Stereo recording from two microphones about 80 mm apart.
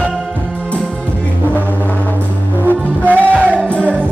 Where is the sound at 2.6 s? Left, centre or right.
Right.